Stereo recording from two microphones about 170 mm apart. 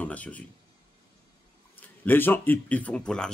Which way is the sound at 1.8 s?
10° left (ahead or behind).